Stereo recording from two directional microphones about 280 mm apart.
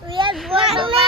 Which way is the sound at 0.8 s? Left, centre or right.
Centre.